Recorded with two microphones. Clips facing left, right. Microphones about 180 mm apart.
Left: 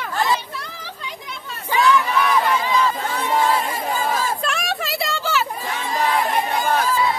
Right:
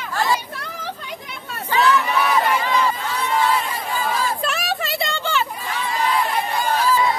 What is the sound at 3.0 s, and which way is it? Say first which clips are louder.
Chatter: left 1 dB; 45° left (ahead or behind).